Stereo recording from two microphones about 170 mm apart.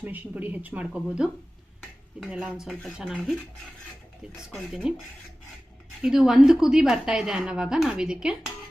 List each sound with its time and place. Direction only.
0.0 s a woman's voice: 10° right (ahead or behind)
4.4 s a woman's voice: 5° right (ahead or behind)
6.0 s a woman's voice: 5° right (ahead or behind)